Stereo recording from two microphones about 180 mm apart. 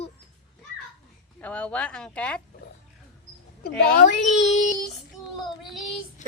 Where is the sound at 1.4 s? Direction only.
5° left (ahead or behind).